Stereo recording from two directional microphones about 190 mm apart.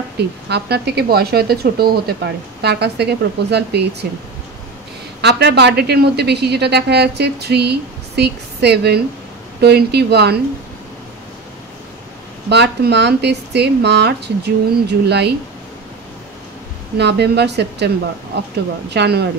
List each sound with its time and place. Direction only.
0.5 s speech: 60° right (ahead or behind)
5.2 s speech: 60° right (ahead or behind)
12.4 s speech: 60° right (ahead or behind)
17.0 s speech: 60° right (ahead or behind)